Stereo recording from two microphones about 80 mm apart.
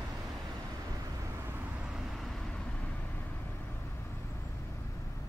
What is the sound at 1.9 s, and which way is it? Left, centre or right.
Vehicle, centre.